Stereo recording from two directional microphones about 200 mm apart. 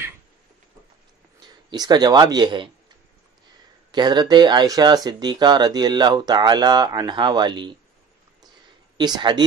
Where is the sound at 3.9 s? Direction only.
20° right (ahead or behind).